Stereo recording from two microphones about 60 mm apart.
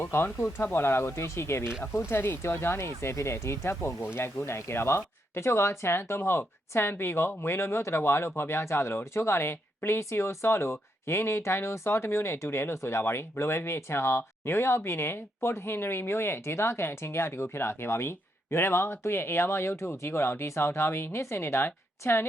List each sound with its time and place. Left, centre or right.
0.0 s speech: left